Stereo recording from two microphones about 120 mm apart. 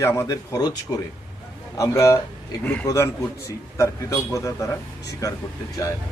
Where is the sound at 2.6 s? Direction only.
15° left (ahead or behind).